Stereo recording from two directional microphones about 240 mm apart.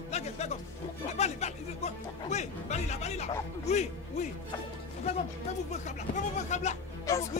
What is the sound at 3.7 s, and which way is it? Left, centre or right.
Speech, left.